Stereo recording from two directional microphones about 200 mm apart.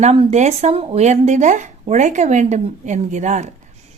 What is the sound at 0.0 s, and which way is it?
A woman's voice, 30° right (ahead or behind).